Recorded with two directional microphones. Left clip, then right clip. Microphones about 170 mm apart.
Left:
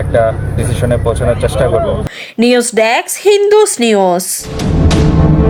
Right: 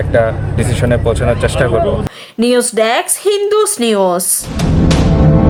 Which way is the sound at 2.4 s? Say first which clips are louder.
Left 2 dB; 15° left (ahead or behind).